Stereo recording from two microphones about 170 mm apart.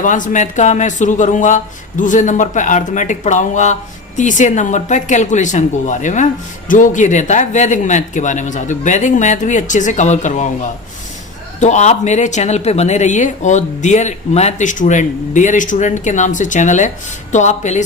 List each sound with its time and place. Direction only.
0.0 s speech: 50° left (ahead or behind)